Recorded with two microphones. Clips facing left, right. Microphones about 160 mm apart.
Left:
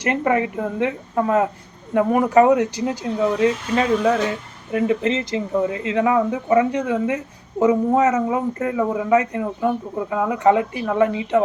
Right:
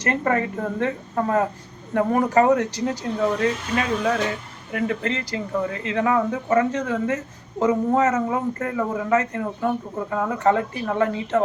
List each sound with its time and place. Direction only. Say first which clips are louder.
0.0 s speech: left 3 dB; 15° left (ahead or behind)